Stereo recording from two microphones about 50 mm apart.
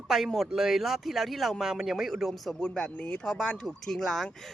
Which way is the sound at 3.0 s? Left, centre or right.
Left.